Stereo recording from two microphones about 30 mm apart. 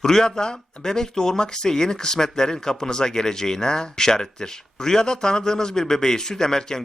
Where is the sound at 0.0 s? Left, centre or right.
Centre.